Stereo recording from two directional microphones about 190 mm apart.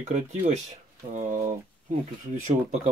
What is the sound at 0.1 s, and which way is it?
Speech, 40° right (ahead or behind).